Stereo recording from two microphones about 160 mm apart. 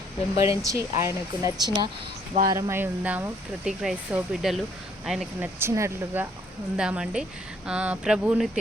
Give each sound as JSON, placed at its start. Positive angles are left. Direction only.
{"t": 0.3, "sound": "speech", "side_deg": -20}
{"t": 5.5, "sound": "speech", "side_deg": -15}
{"t": 6.7, "sound": "speech", "side_deg": -5}